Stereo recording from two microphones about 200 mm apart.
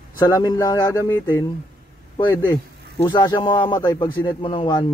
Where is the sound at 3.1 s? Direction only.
20° left (ahead or behind).